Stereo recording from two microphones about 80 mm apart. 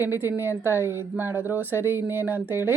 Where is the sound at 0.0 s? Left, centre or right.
Right.